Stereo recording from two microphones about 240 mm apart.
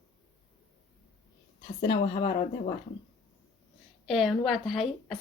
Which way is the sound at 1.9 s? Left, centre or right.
Left.